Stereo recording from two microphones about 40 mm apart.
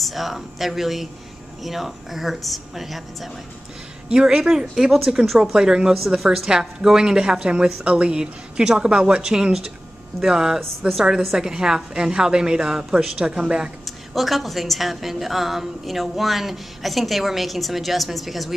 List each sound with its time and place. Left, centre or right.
0.0 s a woman's voice: centre
4.1 s a woman's voice: centre
13.8 s a woman's voice: centre